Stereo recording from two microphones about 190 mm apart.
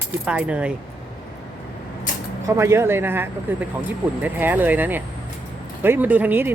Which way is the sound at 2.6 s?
15° right (ahead or behind).